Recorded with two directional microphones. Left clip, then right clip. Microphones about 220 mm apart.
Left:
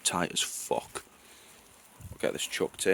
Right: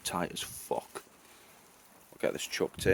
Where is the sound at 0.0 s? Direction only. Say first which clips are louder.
Left 5 dB; 15° left (ahead or behind).